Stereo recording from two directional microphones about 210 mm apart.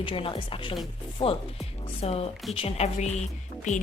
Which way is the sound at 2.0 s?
30° left (ahead or behind).